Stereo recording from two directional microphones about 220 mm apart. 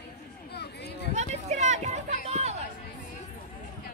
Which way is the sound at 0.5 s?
50° left (ahead or behind).